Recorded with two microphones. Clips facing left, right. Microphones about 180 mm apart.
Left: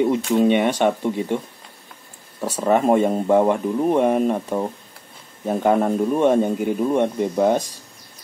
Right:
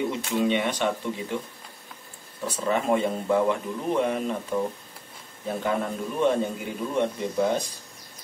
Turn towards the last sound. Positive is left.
turn(degrees=50)  # may be behind; listen again after turning